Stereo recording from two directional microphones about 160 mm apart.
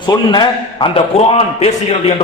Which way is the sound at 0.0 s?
30° left (ahead or behind).